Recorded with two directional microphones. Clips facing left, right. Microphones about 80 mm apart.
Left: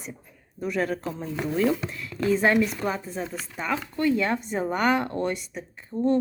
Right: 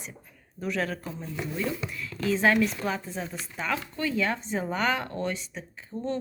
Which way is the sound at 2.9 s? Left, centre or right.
Centre.